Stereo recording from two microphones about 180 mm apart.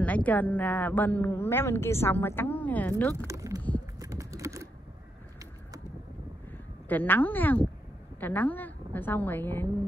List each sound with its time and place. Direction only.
0.0 s a woman's voice: 10° left (ahead or behind)
3.3 s a sound: 15° right (ahead or behind)
4.0 s typing: 15° right (ahead or behind)
6.9 s a woman's voice: 10° left (ahead or behind)